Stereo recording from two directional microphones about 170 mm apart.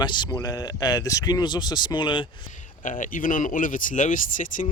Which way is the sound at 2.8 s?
50° left (ahead or behind).